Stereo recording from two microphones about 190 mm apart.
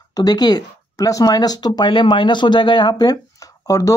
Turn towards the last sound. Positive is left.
turn(degrees=20)  # may be behind; listen again after turning